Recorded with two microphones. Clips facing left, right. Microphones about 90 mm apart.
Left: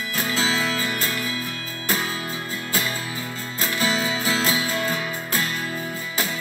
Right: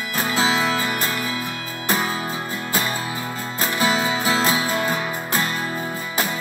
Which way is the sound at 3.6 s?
40° right (ahead or behind).